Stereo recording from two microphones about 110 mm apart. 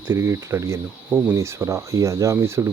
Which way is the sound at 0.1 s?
25° right (ahead or behind).